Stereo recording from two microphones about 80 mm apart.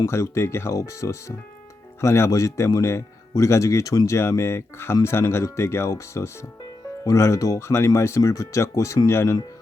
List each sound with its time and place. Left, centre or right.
0.0 s speech: left